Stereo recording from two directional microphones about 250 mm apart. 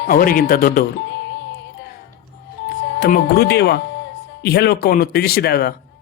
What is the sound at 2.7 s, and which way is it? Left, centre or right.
Speech, left.